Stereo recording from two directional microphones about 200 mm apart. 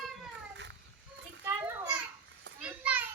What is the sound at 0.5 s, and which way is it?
Children playing, 60° right (ahead or behind).